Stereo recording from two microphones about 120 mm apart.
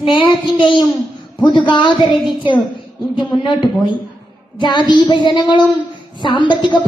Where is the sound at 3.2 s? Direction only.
40° left (ahead or behind).